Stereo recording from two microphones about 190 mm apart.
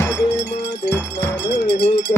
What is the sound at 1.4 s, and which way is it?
Cowbell, 65° left (ahead or behind).